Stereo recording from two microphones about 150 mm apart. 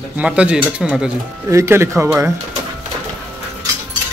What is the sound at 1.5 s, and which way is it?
Speech, 20° right (ahead or behind).